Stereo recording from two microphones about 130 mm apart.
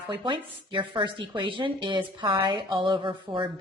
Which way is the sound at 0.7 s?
40° right (ahead or behind).